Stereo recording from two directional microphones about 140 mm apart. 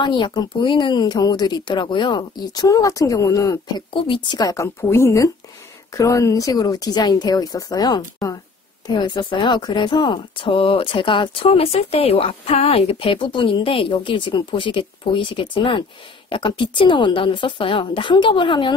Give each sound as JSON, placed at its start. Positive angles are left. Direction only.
{"t": 0.0, "sound": "a woman's voice", "side_deg": 30}